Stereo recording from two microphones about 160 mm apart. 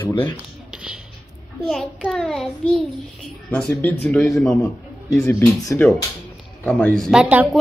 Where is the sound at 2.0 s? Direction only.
5° left (ahead or behind).